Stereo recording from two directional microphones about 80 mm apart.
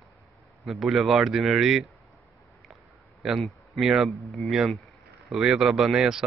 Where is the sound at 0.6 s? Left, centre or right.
Centre.